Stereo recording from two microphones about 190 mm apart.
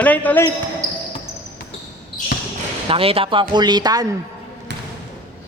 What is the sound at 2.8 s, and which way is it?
Speech, 30° right (ahead or behind).